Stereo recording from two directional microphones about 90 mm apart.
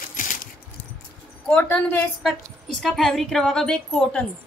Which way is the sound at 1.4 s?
20° left (ahead or behind).